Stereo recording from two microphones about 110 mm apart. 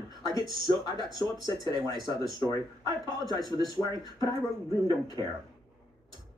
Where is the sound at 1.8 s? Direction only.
35° left (ahead or behind).